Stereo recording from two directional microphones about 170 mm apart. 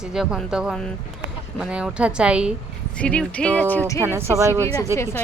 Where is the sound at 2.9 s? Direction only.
5° left (ahead or behind).